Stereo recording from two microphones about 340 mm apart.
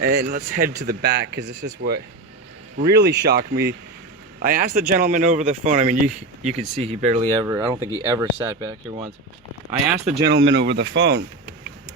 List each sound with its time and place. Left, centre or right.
0.0 s speech: right; by 9.0 s centre
10.2 s speech: right